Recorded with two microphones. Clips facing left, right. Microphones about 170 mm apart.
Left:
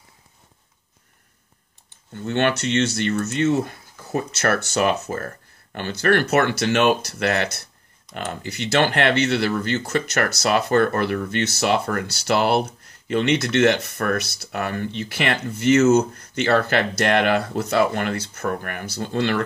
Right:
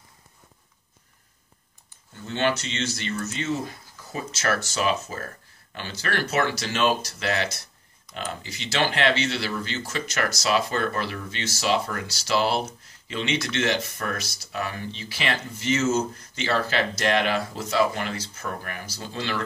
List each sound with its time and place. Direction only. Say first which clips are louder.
2.1 s speech: left 4 dB; 60° left (ahead or behind)